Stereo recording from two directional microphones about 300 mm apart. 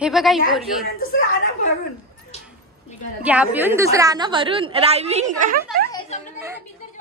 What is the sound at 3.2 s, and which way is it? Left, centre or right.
A woman's voice, centre.